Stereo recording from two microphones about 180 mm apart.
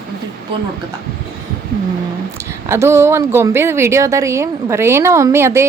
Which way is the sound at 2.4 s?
15° right (ahead or behind).